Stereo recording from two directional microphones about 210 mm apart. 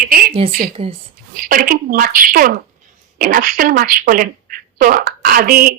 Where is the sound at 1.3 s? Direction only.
40° right (ahead or behind).